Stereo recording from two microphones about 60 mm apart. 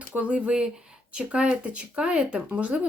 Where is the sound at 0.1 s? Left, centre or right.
Right.